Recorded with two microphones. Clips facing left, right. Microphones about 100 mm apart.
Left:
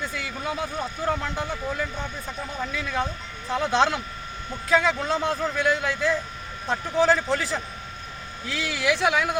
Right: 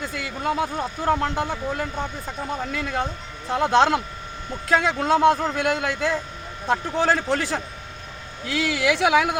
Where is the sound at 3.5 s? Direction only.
60° right (ahead or behind).